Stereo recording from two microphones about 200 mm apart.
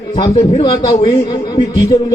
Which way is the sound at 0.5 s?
20° left (ahead or behind).